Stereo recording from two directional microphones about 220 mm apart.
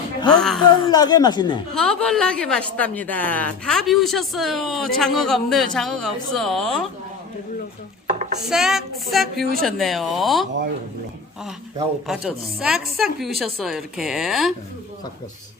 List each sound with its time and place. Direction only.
0.3 s a woman's voice: 5° left (ahead or behind)
0.7 s speech: 20° left (ahead or behind)
1.7 s a woman's voice: 5° left (ahead or behind)
8.0 s dishes: 45° right (ahead or behind)
8.4 s a woman's voice: centre (ahead or behind)
12.0 s a woman's voice: centre (ahead or behind)